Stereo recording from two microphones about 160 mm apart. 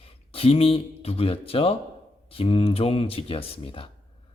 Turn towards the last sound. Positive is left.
turn(degrees=35)  # may be behind; listen again after turning